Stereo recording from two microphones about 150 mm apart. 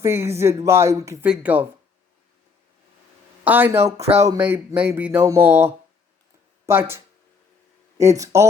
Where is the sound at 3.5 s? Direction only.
15° right (ahead or behind).